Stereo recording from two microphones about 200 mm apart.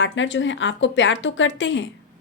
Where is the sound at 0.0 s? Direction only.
70° left (ahead or behind).